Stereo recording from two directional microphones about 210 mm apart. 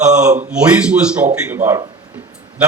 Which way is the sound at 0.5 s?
5° right (ahead or behind).